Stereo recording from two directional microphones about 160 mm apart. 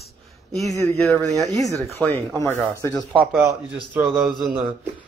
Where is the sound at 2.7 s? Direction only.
20° left (ahead or behind).